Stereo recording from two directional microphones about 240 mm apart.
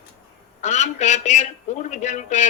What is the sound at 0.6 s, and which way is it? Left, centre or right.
Speech, left.